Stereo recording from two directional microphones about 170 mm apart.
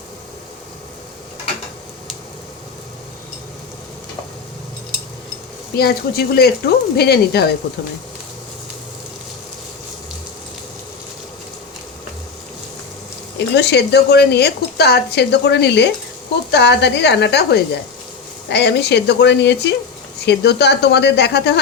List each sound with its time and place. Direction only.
5.7 s speech: 65° left (ahead or behind)
13.5 s a woman's voice: 90° left
20.2 s speech: 75° left (ahead or behind)